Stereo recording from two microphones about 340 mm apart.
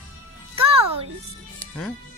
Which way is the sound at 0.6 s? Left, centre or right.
Centre.